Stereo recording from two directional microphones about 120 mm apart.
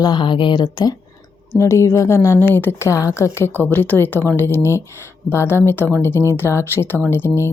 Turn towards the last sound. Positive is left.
turn(degrees=20)  # may be behind; listen again after turning